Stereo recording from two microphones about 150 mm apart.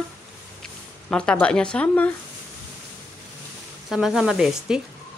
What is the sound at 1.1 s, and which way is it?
Speech, 5° left (ahead or behind).